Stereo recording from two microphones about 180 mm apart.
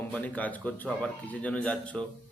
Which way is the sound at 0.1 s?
10° left (ahead or behind).